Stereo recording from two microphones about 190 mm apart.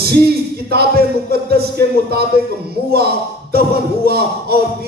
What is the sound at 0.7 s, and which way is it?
Speech, 55° right (ahead or behind).